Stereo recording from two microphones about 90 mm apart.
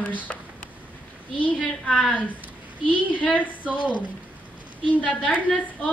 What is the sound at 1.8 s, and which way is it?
Speech, 5° left (ahead or behind).